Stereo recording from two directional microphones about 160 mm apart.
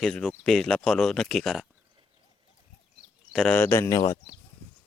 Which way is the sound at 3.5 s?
15° left (ahead or behind).